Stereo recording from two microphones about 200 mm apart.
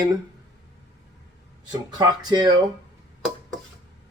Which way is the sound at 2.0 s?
20° right (ahead or behind).